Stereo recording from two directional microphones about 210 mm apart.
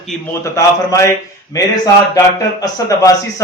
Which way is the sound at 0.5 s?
15° left (ahead or behind).